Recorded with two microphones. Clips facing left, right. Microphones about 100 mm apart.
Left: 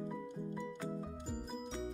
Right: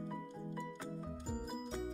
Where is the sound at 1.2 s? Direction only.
5° right (ahead or behind).